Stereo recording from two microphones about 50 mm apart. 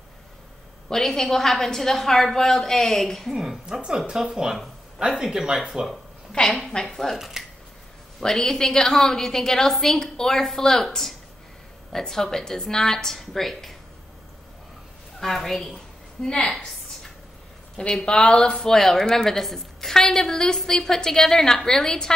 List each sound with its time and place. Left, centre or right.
0.8 s a woman's voice: centre
3.3 s speech: centre
6.4 s a woman's voice: left
6.7 s a woman's voice: centre
7.2 s speech: centre
8.2 s a woman's voice: centre
15.1 s a sound: centre
18.0 s a woman's voice: centre